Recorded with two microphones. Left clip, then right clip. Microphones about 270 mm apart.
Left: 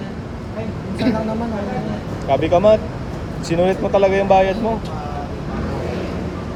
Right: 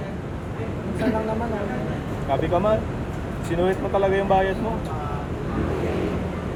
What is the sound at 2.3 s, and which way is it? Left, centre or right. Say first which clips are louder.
Speech: left 8 dB; left.